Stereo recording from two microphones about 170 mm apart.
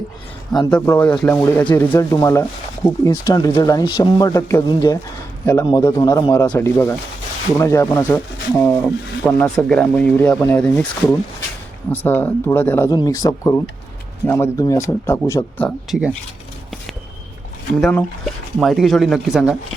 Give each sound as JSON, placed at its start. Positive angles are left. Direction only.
{"t": 0.7, "sound": "speech", "side_deg": 15}
{"t": 11.9, "sound": "speech", "side_deg": 10}
{"t": 15.6, "sound": "speech", "side_deg": -5}
{"t": 17.7, "sound": "speech", "side_deg": 0}